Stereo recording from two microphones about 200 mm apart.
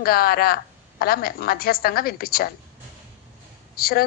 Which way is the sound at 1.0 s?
50° left (ahead or behind).